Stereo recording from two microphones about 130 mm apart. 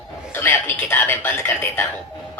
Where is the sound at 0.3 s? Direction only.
15° left (ahead or behind).